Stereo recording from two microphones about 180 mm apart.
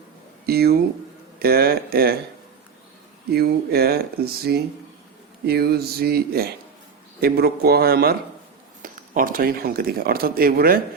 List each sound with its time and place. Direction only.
0.4 s speech: 60° right (ahead or behind)
3.3 s speech: 60° right (ahead or behind)
8.8 s speech: 50° right (ahead or behind)